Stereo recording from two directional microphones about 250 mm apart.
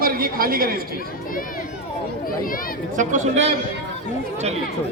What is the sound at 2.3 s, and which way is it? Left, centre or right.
Speech, left.